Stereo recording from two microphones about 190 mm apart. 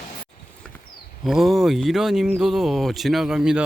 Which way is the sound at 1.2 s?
Centre (ahead or behind).